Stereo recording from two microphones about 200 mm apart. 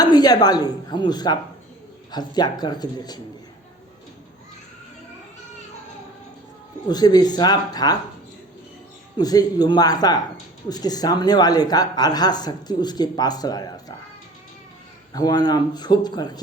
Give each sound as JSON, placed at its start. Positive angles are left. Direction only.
{"t": 0.0, "sound": "speech", "side_deg": 20}
{"t": 6.8, "sound": "speech", "side_deg": 20}
{"t": 9.1, "sound": "speech", "side_deg": 20}
{"t": 15.1, "sound": "speech", "side_deg": 20}